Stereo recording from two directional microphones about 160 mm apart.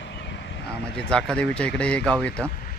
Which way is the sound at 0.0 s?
90° left.